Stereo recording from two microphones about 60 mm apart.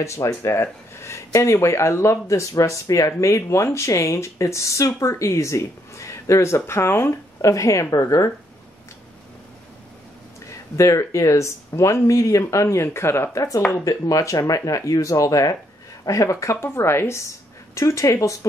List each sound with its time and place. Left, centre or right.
0.0 s speech: left
10.5 s speech: left
13.8 s speech: left
17.7 s speech: left